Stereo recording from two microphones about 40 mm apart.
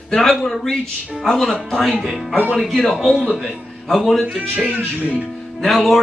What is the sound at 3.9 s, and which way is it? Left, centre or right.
Speech, centre.